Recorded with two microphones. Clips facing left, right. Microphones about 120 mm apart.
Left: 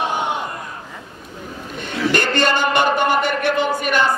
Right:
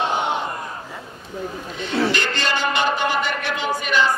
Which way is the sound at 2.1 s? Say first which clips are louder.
Left 6 dB; 50° left (ahead or behind).